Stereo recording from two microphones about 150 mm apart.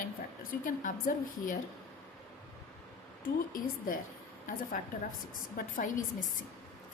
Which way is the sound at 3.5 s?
65° left (ahead or behind).